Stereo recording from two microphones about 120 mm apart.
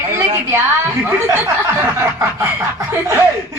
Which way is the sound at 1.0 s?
20° right (ahead or behind).